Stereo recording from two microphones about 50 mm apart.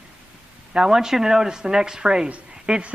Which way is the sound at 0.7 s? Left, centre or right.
Centre.